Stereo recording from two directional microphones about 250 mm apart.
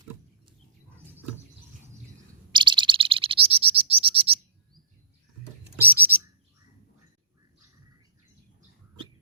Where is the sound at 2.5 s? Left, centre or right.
Centre.